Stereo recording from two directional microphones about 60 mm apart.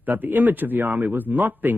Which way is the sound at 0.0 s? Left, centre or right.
Right.